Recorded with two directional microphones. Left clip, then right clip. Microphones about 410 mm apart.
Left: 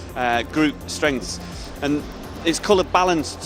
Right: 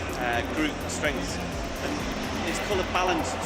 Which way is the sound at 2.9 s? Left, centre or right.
Left.